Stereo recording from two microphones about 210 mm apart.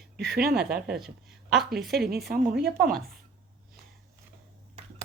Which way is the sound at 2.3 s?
45° right (ahead or behind).